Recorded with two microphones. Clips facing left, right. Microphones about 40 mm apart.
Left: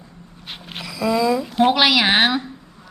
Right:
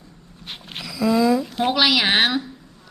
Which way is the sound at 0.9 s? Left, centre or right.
Left.